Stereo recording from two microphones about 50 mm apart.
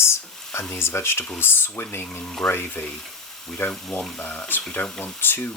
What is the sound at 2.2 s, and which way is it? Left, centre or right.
Speech, centre.